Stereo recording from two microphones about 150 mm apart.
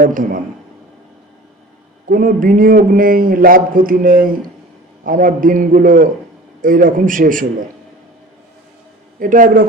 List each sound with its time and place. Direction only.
0.0 s a man's voice: 65° right (ahead or behind)
2.0 s a man's voice: 65° right (ahead or behind)
9.1 s a man's voice: 65° right (ahead or behind)